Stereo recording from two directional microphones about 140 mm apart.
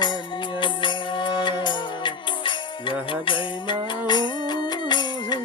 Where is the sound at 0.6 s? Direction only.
35° left (ahead or behind).